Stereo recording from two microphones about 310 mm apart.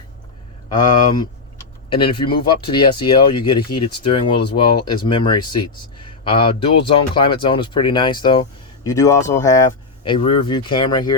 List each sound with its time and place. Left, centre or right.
2.0 s speech: centre